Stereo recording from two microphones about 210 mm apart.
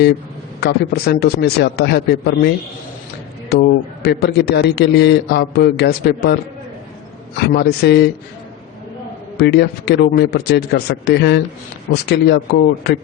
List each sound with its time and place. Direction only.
0.6 s a man's voice: 50° left (ahead or behind)
3.5 s a man's voice: 50° left (ahead or behind)
7.3 s a man's voice: 50° left (ahead or behind)
9.4 s a man's voice: 50° left (ahead or behind)